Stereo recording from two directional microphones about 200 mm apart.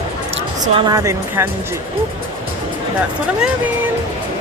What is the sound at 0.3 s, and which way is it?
Speech, 25° right (ahead or behind).